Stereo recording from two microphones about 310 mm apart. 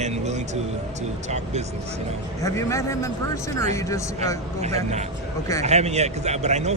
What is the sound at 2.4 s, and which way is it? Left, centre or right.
A man's voice, centre.